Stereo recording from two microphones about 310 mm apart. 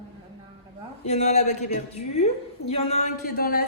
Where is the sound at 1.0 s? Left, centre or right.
Left.